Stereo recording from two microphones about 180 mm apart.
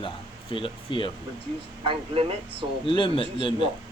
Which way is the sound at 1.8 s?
30° right (ahead or behind).